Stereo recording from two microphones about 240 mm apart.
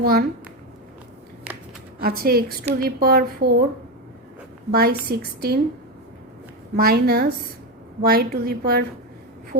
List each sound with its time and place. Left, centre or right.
0.0 s a woman's voice: right
2.0 s a woman's voice: right
4.7 s a woman's voice: right
6.7 s a woman's voice: right